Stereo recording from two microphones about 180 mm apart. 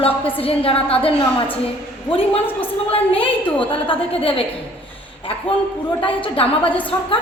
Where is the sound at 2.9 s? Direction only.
30° left (ahead or behind).